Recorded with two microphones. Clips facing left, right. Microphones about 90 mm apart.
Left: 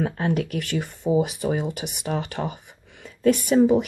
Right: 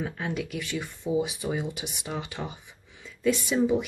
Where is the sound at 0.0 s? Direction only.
55° left (ahead or behind).